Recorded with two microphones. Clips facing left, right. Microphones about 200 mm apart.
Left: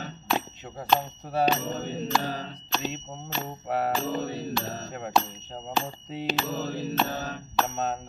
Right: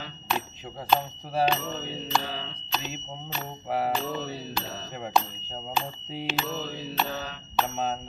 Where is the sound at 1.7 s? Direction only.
45° left (ahead or behind).